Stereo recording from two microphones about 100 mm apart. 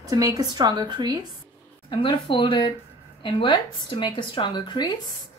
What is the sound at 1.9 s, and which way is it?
A woman's voice, 60° left (ahead or behind).